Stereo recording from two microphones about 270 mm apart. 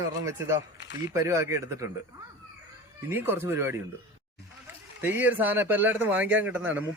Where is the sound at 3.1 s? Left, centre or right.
Centre.